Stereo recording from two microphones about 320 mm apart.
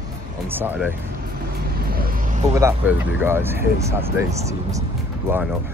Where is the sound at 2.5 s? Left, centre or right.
Centre.